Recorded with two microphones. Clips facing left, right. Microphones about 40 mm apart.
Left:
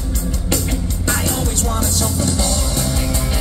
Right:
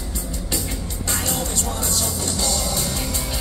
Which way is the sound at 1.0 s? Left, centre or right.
Left.